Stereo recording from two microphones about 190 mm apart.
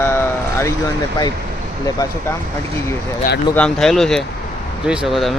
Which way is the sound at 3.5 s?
5° left (ahead or behind).